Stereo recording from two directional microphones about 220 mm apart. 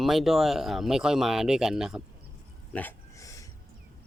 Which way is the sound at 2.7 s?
10° left (ahead or behind).